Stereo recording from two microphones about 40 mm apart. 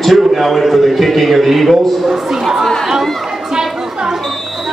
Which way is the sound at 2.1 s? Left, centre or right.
Centre.